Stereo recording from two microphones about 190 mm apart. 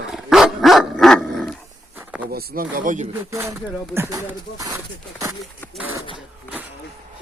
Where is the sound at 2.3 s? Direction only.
55° right (ahead or behind).